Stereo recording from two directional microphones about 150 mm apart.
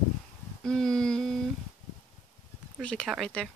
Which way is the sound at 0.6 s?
5° left (ahead or behind).